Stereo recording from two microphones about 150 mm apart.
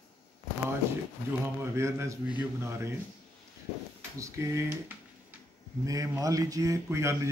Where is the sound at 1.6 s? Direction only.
20° right (ahead or behind).